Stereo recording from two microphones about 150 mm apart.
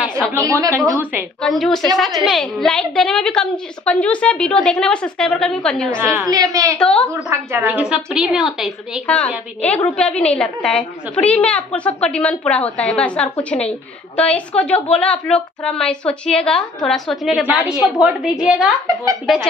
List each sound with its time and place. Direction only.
0.3 s a woman's voice: 20° right (ahead or behind)
1.4 s a woman's voice: centre (ahead or behind)
6.2 s a woman's voice: 25° right (ahead or behind)
6.8 s a child's voice: 10° left (ahead or behind)
7.1 s a woman's voice: 20° right (ahead or behind)
9.0 s a child's voice: 10° left (ahead or behind)
18.9 s a woman's voice: 20° right (ahead or behind)